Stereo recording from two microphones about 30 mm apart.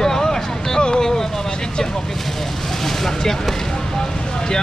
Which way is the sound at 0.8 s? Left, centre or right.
Left.